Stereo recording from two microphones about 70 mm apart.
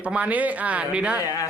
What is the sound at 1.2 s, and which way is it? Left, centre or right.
Speech, left.